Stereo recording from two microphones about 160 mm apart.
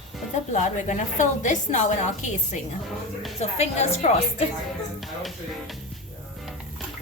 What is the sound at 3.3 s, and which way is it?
A woman's voice, 40° left (ahead or behind).